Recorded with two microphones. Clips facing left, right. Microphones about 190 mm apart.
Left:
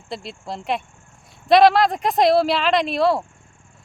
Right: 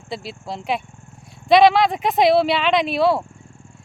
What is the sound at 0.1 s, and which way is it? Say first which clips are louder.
Speech: right 1 dB; centre (ahead or behind).